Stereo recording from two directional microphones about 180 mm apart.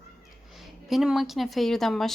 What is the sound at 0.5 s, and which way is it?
Speech, centre (ahead or behind).